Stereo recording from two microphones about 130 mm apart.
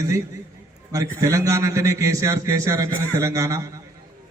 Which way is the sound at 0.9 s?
25° right (ahead or behind).